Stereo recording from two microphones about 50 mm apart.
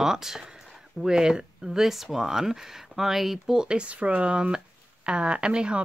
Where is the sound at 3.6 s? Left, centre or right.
Right.